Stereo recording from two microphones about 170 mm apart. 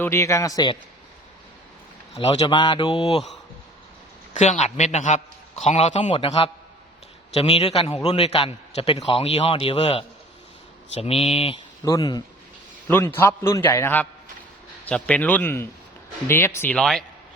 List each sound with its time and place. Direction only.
0.0 s a man's voice: 15° left (ahead or behind)
2.4 s speech: 30° left (ahead or behind)
4.4 s a man's voice: 40° left (ahead or behind)
11.9 s a man's voice: 20° left (ahead or behind); by 17.0 s 5° left (ahead or behind)